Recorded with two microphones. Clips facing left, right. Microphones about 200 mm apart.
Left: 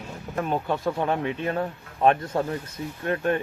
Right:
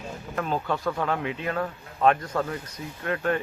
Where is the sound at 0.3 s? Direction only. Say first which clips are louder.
Left 2 dB; 20° left (ahead or behind).